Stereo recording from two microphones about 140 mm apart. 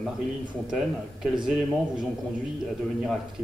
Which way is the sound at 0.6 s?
5° right (ahead or behind).